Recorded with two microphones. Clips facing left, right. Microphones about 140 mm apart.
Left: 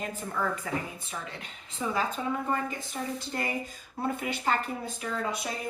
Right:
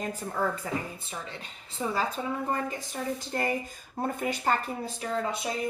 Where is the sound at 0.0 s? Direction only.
35° right (ahead or behind).